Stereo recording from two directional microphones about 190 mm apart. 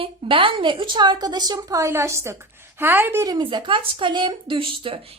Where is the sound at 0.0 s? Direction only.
25° right (ahead or behind).